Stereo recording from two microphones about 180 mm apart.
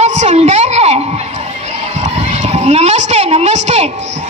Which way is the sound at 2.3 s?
40° right (ahead or behind).